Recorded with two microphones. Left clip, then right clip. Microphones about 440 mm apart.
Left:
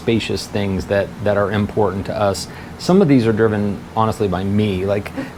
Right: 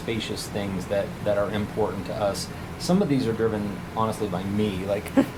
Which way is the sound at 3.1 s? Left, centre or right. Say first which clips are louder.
Left 9 dB; left.